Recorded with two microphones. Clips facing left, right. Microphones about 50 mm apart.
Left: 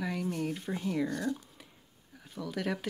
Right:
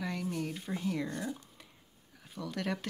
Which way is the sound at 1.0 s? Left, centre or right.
Right.